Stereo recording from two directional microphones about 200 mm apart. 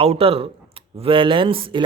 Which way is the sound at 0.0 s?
30° right (ahead or behind).